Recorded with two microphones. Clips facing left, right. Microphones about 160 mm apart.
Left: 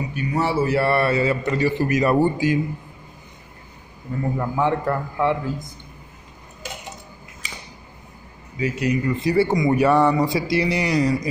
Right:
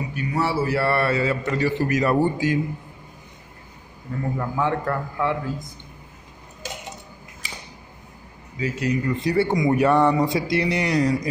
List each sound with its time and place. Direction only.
0.1 s a man's voice: 20° left (ahead or behind)
4.4 s a man's voice: 25° left (ahead or behind)
8.5 s a man's voice: 15° left (ahead or behind)